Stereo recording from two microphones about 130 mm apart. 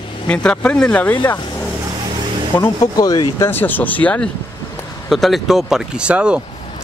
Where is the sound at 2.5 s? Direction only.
30° left (ahead or behind).